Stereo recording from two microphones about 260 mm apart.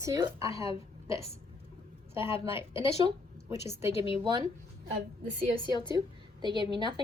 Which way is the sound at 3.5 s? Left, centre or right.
Centre.